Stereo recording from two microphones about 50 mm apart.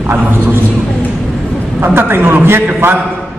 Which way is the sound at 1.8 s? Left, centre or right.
Right.